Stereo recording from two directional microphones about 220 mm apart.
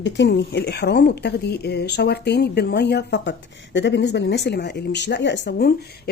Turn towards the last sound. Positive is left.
turn(degrees=50)  # may be behind; listen again after turning